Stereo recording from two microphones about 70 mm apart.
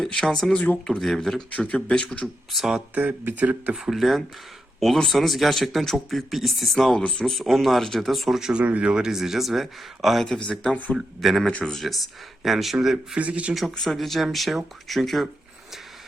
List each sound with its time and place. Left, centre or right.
0.0 s a sound: centre
0.3 s speech: centre
0.5 s speech: left
0.9 s speech: centre
1.5 s speech: centre
2.5 s speech: centre
2.9 s speech: right
3.8 s speech: centre
10.9 s speech: centre
13.1 s speech: centre
13.5 s speech: centre